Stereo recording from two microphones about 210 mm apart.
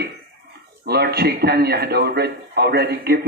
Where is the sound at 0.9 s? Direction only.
50° right (ahead or behind).